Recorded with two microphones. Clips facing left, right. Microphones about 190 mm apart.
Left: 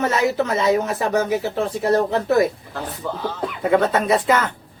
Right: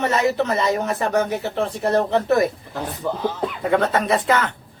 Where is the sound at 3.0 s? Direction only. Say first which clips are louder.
Right 3 dB; 20° right (ahead or behind).